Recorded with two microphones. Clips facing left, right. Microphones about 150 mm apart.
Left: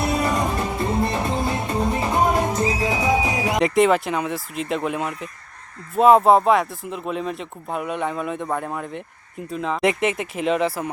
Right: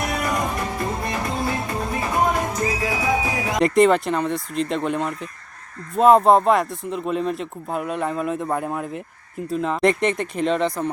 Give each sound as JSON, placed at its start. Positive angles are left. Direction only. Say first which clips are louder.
{"t": 0.0, "sound": "music", "louder": "left 2 dB", "side_deg": 30}
{"t": 3.6, "sound": "a man's voice", "louder": "right 2 dB", "side_deg": 0}